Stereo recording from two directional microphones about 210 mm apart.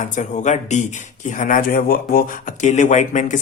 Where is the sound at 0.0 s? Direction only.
35° left (ahead or behind).